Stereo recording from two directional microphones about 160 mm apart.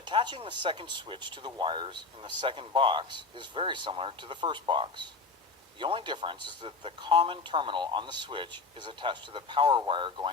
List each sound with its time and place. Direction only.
0.0 s speech: 30° right (ahead or behind)